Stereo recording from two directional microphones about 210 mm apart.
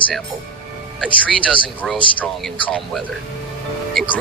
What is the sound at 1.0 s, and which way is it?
Speech, 5° left (ahead or behind).